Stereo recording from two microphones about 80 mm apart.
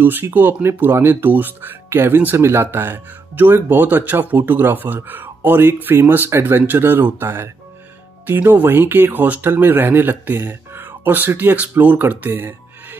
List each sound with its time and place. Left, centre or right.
0.0 s speech: right